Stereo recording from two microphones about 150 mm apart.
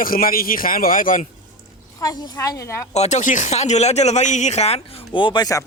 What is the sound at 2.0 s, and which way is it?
Speech, 25° left (ahead or behind).